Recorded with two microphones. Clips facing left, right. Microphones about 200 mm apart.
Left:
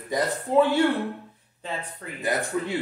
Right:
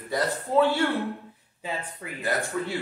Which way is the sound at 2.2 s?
20° left (ahead or behind).